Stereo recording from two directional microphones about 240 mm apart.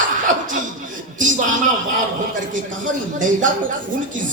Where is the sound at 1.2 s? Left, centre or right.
Right.